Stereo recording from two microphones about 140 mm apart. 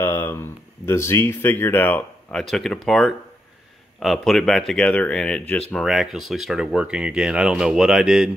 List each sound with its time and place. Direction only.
0.0 s speech: 15° left (ahead or behind)
2.5 s speech: 5° left (ahead or behind)